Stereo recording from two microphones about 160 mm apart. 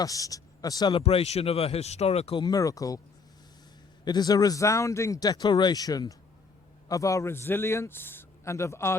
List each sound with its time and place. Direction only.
0.0 s a man's voice: 20° left (ahead or behind); by 2.4 s 40° left (ahead or behind)
2.4 s speech: 20° left (ahead or behind)
4.0 s a man's voice: 25° left (ahead or behind)